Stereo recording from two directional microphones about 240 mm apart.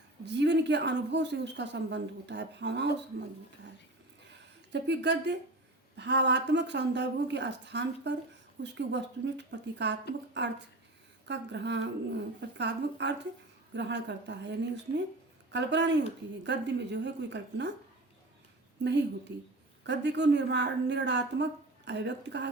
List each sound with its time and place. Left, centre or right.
0.3 s a woman's voice: right
4.3 s a sound: right
6.0 s a woman's voice: right
15.5 s a woman's voice: right
19.3 s a woman's voice: right